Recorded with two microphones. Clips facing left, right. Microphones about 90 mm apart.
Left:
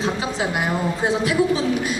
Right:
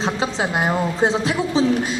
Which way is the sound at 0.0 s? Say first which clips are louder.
Right 1 dB; 25° right (ahead or behind).